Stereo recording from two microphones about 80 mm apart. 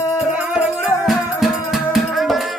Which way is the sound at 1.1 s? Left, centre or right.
Centre.